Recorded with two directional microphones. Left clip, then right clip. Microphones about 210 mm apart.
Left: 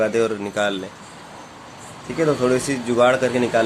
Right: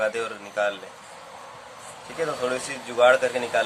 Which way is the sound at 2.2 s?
35° left (ahead or behind).